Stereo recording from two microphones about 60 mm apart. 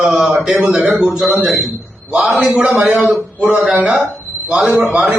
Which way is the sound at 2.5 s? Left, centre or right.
Centre.